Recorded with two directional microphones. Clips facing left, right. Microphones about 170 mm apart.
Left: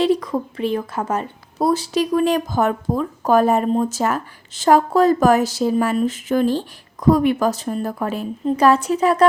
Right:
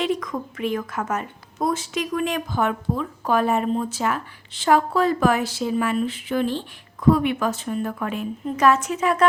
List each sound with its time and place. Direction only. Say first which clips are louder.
0.0 s a woman's voice: left 6 dB; 35° left (ahead or behind)